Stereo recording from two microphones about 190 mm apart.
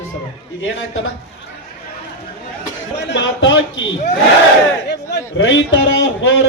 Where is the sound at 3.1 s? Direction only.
75° left (ahead or behind).